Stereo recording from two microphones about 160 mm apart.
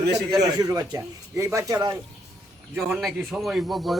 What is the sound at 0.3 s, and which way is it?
Speech, 20° right (ahead or behind).